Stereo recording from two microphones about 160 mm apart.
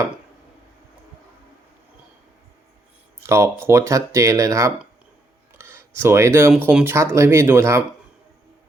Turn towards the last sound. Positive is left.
turn(degrees=-15)  # may be behind; listen again after turning